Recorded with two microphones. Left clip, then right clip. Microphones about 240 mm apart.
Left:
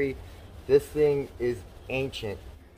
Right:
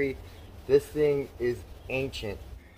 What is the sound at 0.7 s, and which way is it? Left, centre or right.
Speech, centre.